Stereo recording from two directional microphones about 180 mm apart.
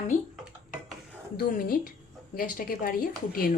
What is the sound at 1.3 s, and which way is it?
A woman's voice, 55° left (ahead or behind).